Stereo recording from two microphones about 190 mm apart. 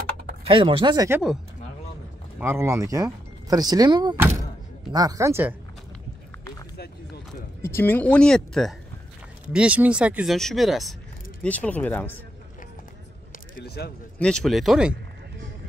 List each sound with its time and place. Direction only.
0.5 s speech: 25° right (ahead or behind)
2.4 s speech: 15° right (ahead or behind)
7.6 s speech: 10° left (ahead or behind)
13.6 s speech: 55° left (ahead or behind)
14.1 s speech: 5° left (ahead or behind)